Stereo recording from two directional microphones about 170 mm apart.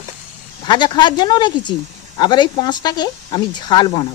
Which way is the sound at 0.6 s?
25° left (ahead or behind).